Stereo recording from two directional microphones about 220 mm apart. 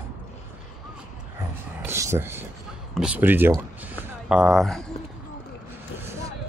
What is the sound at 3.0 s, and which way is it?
Speech, 10° right (ahead or behind).